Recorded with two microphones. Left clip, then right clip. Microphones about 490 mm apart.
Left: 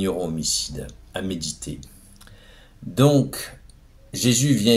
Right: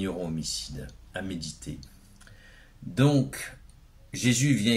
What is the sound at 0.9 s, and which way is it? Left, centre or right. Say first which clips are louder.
Speech: left 6 dB; right.